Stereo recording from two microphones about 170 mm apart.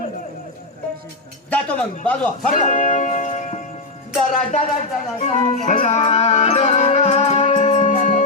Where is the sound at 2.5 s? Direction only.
45° left (ahead or behind).